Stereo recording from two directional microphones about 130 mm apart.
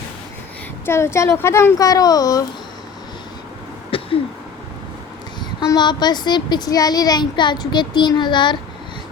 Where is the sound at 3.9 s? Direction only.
45° left (ahead or behind).